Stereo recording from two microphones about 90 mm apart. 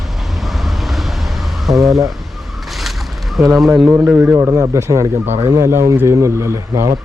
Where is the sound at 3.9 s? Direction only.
20° right (ahead or behind).